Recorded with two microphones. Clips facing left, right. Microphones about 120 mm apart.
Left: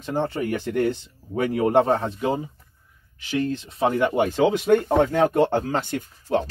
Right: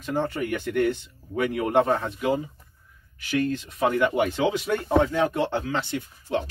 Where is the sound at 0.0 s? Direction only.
30° left (ahead or behind).